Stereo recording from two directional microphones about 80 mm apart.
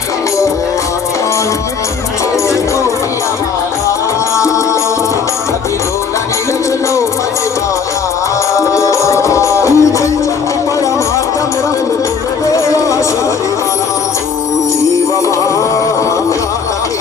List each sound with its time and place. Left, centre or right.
4.4 s music: left
8.5 s music: left
12.5 s music: left